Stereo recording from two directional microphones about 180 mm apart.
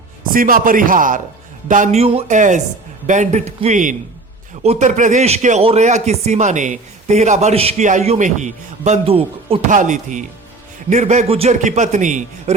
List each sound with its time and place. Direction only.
0.3 s a man's voice: 50° right (ahead or behind); by 9.6 s 30° right (ahead or behind)
9.6 s a man's voice: 45° right (ahead or behind)